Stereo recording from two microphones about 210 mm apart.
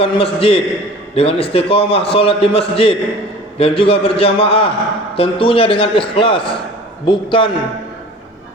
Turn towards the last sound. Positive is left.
turn(degrees=25)  # may be behind; listen again after turning